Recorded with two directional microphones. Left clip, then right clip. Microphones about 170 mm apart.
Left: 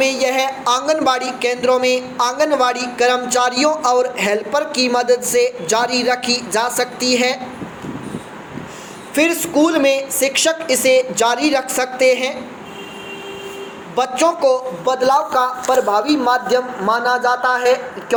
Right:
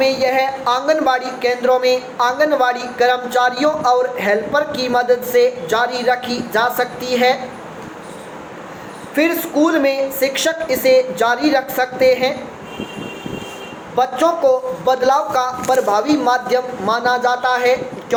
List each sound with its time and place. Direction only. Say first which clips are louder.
0.0 s a man's voice: right 1 dB; 45° left (ahead or behind)
9.1 s speech: left 1 dB; 40° left (ahead or behind)
13.9 s a man's voice: right 1 dB; 40° left (ahead or behind)